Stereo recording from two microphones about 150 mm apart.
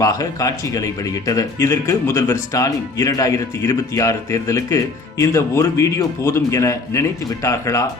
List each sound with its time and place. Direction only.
0.0 s speech: 20° left (ahead or behind)